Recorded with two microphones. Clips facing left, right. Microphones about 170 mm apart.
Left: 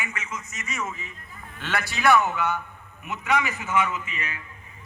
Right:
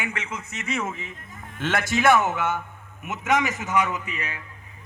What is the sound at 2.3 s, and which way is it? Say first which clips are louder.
A man's voice: right 1 dB; 50° right (ahead or behind).